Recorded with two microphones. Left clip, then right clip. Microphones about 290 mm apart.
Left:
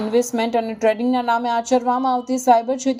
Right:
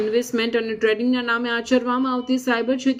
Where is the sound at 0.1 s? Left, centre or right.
Left.